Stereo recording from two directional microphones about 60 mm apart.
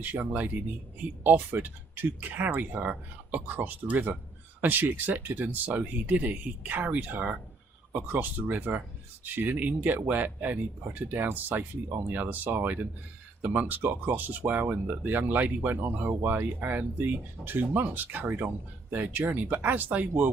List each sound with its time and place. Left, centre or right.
0.0 s speech: right